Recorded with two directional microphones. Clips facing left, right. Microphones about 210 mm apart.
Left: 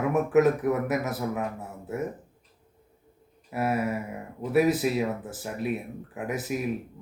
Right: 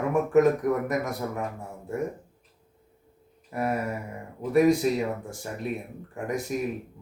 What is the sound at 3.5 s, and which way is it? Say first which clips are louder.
Speech: left 1 dB; 5° left (ahead or behind).